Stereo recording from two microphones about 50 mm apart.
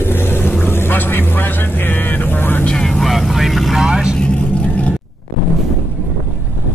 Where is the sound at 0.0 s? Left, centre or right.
Left.